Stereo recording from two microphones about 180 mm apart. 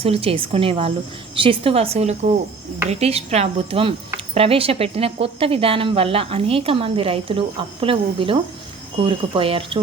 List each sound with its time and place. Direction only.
0.0 s speech: 35° right (ahead or behind)